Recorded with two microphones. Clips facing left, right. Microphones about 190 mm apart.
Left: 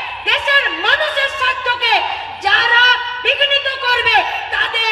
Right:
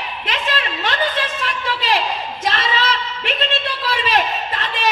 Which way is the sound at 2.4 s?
70° left (ahead or behind).